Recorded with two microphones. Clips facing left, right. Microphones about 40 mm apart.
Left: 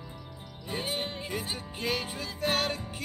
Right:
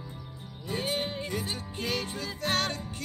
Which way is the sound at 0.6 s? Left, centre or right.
Centre.